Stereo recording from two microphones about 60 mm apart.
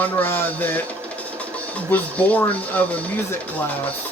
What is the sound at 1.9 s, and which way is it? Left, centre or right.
Speech, left.